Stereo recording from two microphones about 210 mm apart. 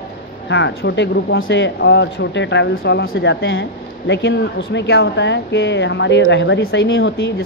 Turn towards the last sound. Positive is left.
turn(degrees=55)  # may be behind; listen again after turning